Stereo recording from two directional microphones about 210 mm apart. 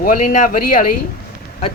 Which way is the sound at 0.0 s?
40° left (ahead or behind).